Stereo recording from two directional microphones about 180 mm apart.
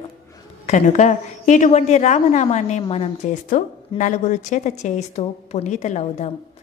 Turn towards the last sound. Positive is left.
turn(degrees=40)  # may be behind; listen again after turning